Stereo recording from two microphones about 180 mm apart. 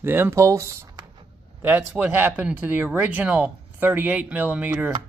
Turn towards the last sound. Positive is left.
turn(degrees=-10)  # may be behind; listen again after turning